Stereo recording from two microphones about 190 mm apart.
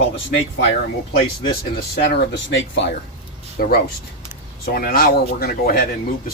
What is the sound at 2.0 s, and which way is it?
Speech, 65° left (ahead or behind).